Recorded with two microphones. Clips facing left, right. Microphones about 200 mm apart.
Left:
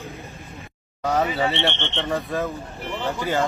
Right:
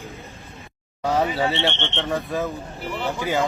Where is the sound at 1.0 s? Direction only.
Centre (ahead or behind).